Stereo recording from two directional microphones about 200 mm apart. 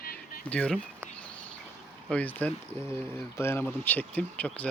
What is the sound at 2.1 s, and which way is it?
Speech, 10° left (ahead or behind).